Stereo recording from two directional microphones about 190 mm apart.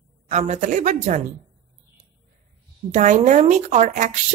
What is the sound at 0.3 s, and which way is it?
Speech, 40° right (ahead or behind).